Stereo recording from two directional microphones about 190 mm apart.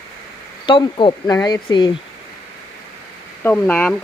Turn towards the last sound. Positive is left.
turn(degrees=5)  # may be behind; listen again after turning